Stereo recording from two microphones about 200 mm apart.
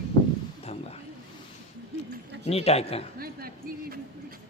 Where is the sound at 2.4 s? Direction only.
30° left (ahead or behind).